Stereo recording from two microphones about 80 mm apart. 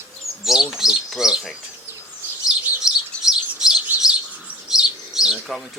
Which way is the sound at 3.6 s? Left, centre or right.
Centre.